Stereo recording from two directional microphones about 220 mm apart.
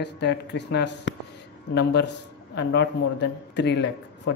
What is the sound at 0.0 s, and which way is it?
Speech, 50° left (ahead or behind).